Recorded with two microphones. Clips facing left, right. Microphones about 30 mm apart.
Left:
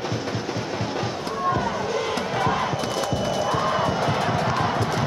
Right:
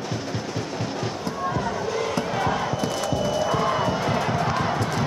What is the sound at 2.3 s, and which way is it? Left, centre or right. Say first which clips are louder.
Music: left 1 dB; centre.